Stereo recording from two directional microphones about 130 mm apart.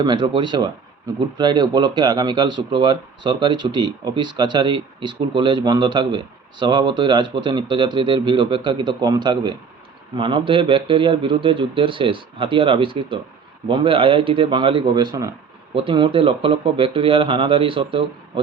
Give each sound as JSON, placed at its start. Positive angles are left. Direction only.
{"t": 0.0, "sound": "a man's voice", "side_deg": -35}